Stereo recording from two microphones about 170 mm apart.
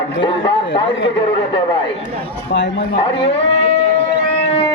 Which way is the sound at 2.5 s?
90° left.